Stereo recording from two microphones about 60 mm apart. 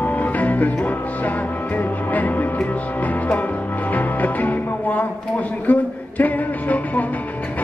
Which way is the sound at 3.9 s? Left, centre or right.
Left.